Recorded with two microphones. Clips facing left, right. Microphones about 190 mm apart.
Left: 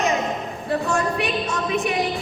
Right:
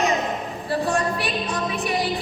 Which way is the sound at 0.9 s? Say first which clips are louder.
Left 1 dB; 35° right (ahead or behind).